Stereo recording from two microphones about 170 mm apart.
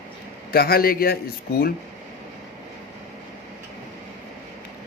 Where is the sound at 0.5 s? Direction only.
65° left (ahead or behind).